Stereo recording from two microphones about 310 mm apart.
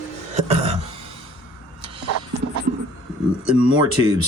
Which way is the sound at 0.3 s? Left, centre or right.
Right.